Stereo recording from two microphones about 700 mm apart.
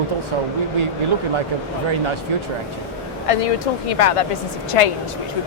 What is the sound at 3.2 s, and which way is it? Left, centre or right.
Speech, left.